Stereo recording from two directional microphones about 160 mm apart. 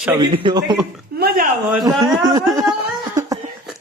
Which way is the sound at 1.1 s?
75° right (ahead or behind).